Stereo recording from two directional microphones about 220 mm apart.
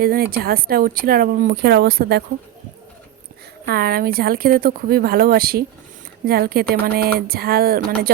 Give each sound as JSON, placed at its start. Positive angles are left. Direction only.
{"t": 0.0, "sound": "speech", "side_deg": -40}
{"t": 3.7, "sound": "speech", "side_deg": -45}